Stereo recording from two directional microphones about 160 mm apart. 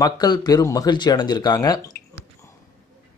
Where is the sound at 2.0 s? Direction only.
75° left (ahead or behind).